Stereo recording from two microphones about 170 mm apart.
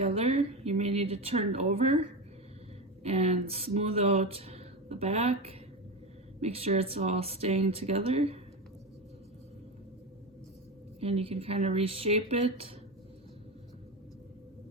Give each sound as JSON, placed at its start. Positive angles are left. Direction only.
{"t": 0.0, "sound": "speech", "side_deg": -35}
{"t": 3.0, "sound": "speech", "side_deg": -40}
{"t": 11.0, "sound": "speech", "side_deg": -35}